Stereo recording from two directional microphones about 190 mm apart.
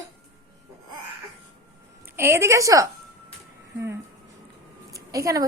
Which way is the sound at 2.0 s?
10° right (ahead or behind).